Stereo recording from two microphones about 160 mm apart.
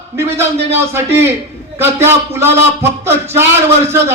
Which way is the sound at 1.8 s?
15° right (ahead or behind).